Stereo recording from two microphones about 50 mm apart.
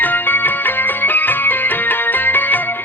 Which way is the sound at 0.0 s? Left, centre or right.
Left.